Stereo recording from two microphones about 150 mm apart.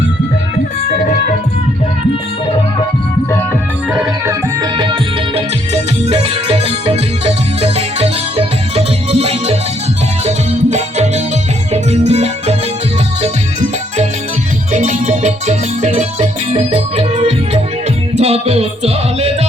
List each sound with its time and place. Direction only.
4.3 s music: 30° right (ahead or behind)
5.7 s music: 40° right (ahead or behind)
14.7 s music: 55° right (ahead or behind)